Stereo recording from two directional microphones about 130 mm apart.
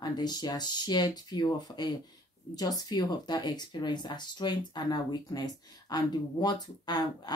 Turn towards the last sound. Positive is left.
turn(degrees=35)  # may be behind; listen again after turning